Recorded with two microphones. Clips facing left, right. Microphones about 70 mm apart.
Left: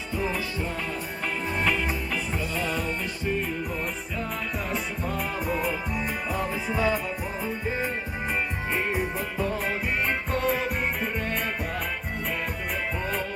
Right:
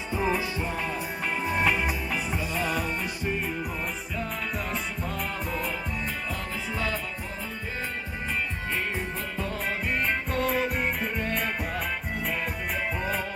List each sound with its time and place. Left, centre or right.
0.1 s music: right
4.7 s music: centre
8.7 s music: centre
9.6 s music: centre